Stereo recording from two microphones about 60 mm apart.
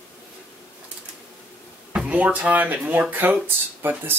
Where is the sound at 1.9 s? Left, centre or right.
Right.